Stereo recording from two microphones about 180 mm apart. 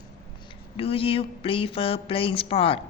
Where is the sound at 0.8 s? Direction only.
30° left (ahead or behind).